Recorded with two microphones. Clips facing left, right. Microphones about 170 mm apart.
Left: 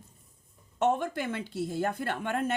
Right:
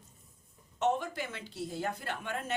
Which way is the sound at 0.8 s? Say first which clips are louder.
Left 4 dB; 55° left (ahead or behind).